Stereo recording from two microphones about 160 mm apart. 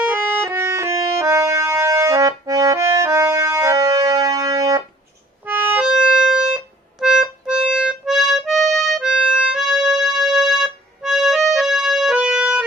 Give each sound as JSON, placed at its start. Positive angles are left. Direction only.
{"t": 0.0, "sound": "music", "side_deg": -10}
{"t": 5.5, "sound": "music", "side_deg": -10}